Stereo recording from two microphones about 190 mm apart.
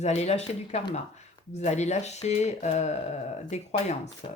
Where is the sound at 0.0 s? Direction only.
35° left (ahead or behind).